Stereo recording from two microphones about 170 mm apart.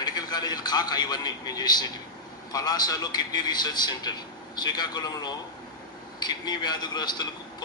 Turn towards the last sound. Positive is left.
turn(degrees=25)  # may be behind; listen again after turning